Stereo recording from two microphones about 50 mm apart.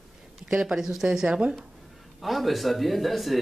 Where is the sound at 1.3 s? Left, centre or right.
Right.